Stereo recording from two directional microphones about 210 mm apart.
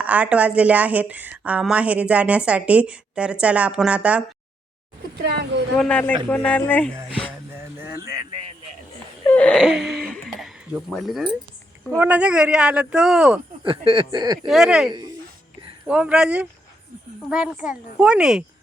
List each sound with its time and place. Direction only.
0.0 s a woman's voice: 5° right (ahead or behind)
5.2 s speech: 50° right (ahead or behind)
5.7 s a man's voice: 5° left (ahead or behind)
7.8 s a sound: 15° right (ahead or behind)
8.3 s a sound: 25° right (ahead or behind)
9.2 s a woman's voice: 5° left (ahead or behind)
13.7 s speech: 25° right (ahead or behind)
14.4 s a woman's voice: centre (ahead or behind)